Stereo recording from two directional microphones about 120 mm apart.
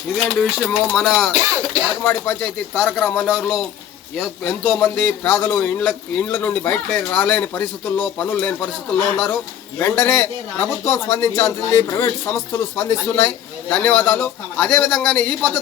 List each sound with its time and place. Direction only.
0.3 s speech: 5° left (ahead or behind)
1.3 s music: 25° right (ahead or behind)
2.0 s a man's voice: 10° left (ahead or behind)
10.9 s a man's voice: 25° left (ahead or behind); by 15.4 s 10° left (ahead or behind)